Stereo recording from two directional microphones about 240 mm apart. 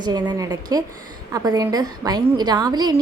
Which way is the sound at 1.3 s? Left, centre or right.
Centre.